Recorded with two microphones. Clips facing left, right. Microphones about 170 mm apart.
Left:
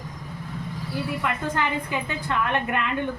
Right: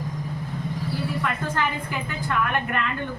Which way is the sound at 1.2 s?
20° left (ahead or behind).